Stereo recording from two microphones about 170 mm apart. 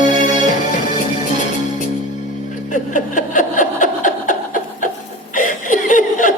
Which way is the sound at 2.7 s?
50° left (ahead or behind).